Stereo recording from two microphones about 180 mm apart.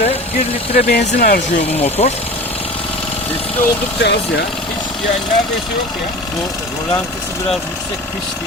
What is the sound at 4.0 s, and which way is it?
Speech, 70° left (ahead or behind).